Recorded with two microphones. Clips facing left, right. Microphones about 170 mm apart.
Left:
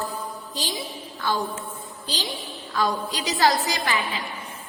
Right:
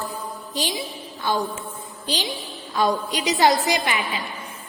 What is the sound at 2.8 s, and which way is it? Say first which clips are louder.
A woman's voice: right 3 dB; 20° right (ahead or behind).